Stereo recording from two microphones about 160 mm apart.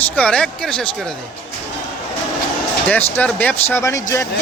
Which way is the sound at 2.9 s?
10° left (ahead or behind).